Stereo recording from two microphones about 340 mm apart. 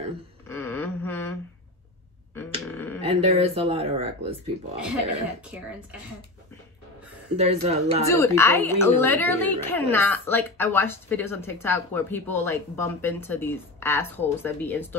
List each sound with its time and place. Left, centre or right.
0.5 s a sound: centre
2.3 s a sound: centre
3.0 s speech: centre
5.4 s speech: centre
7.3 s speech: centre
8.1 s a woman's voice: centre